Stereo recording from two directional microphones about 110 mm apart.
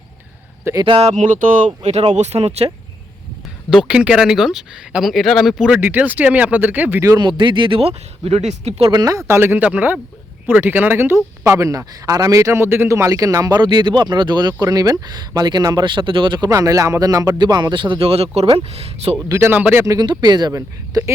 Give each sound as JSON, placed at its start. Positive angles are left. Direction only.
{"t": 0.9, "sound": "speech", "side_deg": -65}
{"t": 1.8, "sound": "speech", "side_deg": -80}
{"t": 3.8, "sound": "speech", "side_deg": -10}
{"t": 7.2, "sound": "speech", "side_deg": -45}
{"t": 8.9, "sound": "speech", "side_deg": -35}
{"t": 16.5, "sound": "speech", "side_deg": -30}
{"t": 18.1, "sound": "speech", "side_deg": -70}
{"t": 19.3, "sound": "speech", "side_deg": -25}
{"t": 19.5, "sound": "speech", "side_deg": -15}
{"t": 19.8, "sound": "speech", "side_deg": -30}
{"t": 20.1, "sound": "speech", "side_deg": -40}